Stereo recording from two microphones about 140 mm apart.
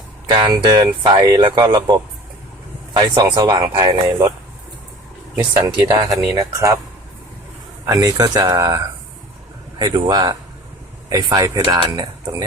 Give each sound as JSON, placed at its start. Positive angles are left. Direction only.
{"t": 0.3, "sound": "speech", "side_deg": -35}
{"t": 5.4, "sound": "speech", "side_deg": -20}
{"t": 7.9, "sound": "speech", "side_deg": -30}
{"t": 11.1, "sound": "speech", "side_deg": -25}